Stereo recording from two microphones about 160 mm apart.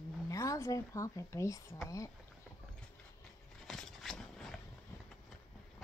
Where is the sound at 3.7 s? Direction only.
Centre (ahead or behind).